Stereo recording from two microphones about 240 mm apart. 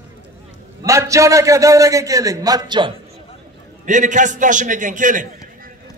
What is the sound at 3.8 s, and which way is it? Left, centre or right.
A man's voice, right.